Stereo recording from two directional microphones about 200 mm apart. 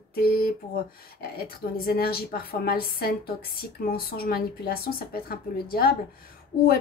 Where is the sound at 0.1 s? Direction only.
50° left (ahead or behind).